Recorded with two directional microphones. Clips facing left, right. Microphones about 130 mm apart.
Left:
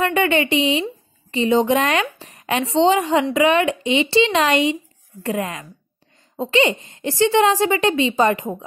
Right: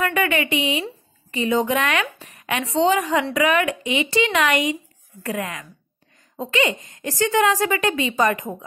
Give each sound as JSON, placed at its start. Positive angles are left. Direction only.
{"t": 0.0, "sound": "a woman's voice", "side_deg": 30}